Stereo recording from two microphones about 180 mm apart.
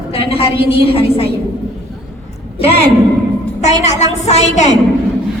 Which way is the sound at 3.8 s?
40° left (ahead or behind).